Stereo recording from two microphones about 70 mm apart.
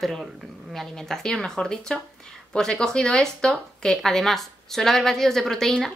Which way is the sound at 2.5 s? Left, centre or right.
Centre.